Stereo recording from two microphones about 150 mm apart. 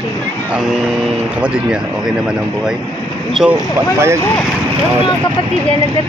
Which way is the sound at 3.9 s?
15° right (ahead or behind).